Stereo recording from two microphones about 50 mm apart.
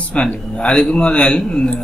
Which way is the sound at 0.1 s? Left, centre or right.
Left.